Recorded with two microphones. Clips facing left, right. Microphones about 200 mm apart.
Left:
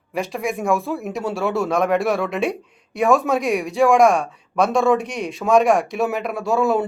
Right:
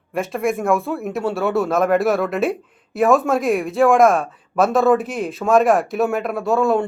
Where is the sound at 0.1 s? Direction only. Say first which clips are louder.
Right 3 dB; centre (ahead or behind).